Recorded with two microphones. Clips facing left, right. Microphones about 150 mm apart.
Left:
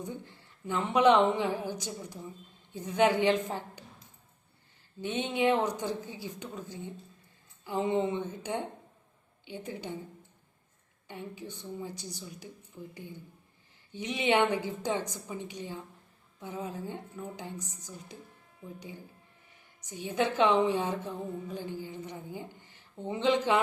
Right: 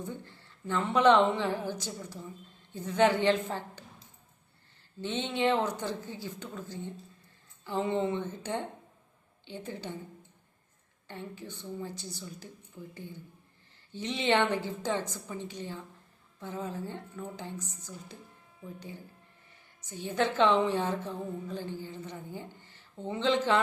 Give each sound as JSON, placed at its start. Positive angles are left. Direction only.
{"t": 0.0, "sound": "a woman's voice", "side_deg": 15}
{"t": 4.9, "sound": "a woman's voice", "side_deg": 10}
{"t": 11.1, "sound": "a woman's voice", "side_deg": 15}
{"t": 19.8, "sound": "a woman's voice", "side_deg": 15}